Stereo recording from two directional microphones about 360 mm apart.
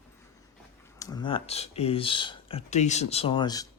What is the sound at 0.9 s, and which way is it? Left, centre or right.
Speech, centre.